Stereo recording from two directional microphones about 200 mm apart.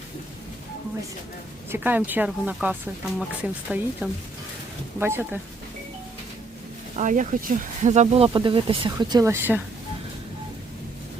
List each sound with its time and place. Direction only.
1.7 s speech: 10° right (ahead or behind)
6.9 s speech: 40° right (ahead or behind)
8.3 s speech: 25° right (ahead or behind)